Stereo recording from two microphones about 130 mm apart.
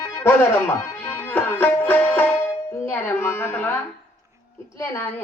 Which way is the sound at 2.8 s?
15° left (ahead or behind).